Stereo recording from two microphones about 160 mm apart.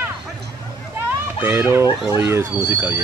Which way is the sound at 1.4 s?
15° right (ahead or behind).